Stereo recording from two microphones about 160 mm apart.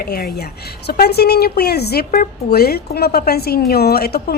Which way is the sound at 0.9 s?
85° left.